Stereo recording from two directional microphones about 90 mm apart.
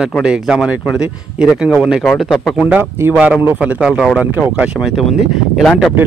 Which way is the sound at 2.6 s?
25° right (ahead or behind).